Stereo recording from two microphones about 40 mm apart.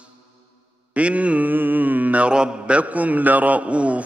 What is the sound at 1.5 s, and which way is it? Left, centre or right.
Mantra, right.